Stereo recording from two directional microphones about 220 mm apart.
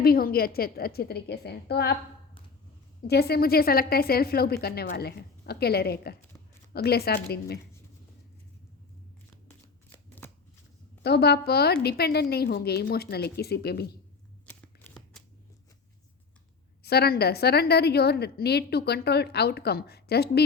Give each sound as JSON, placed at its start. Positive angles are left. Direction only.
{"t": 0.0, "sound": "a woman's voice", "side_deg": 45}
{"t": 3.1, "sound": "a woman's voice", "side_deg": 45}
{"t": 9.9, "sound": "shuffling cards", "side_deg": 10}
{"t": 11.0, "sound": "a woman's voice", "side_deg": 45}
{"t": 14.4, "sound": "shuffling cards", "side_deg": 5}
{"t": 16.8, "sound": "a woman's voice", "side_deg": 45}